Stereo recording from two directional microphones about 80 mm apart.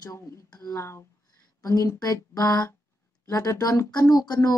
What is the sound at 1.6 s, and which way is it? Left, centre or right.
Speech, left.